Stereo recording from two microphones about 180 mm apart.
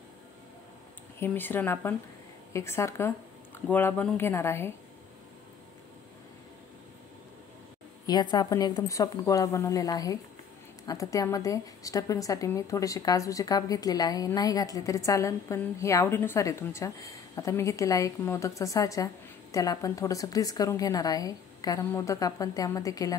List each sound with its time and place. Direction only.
1.2 s speech: 10° left (ahead or behind)
8.1 s a woman's voice: 25° left (ahead or behind)